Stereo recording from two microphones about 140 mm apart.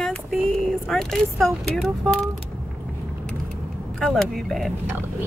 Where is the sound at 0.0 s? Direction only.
5° left (ahead or behind).